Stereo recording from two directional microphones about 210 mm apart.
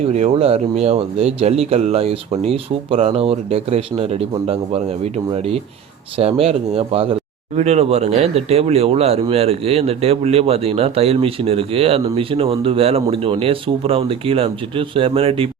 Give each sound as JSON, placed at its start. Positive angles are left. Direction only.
{"t": 0.1, "sound": "speech", "side_deg": -30}